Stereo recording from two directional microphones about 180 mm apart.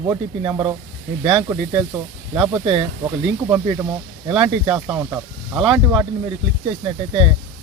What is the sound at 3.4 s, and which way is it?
Speech, 20° right (ahead or behind).